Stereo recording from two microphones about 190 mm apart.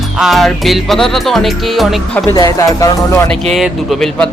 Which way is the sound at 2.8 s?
15° left (ahead or behind).